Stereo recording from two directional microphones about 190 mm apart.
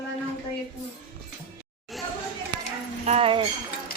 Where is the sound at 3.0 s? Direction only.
35° right (ahead or behind).